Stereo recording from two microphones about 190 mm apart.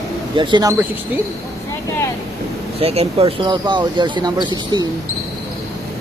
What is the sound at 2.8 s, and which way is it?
Speech, 30° right (ahead or behind).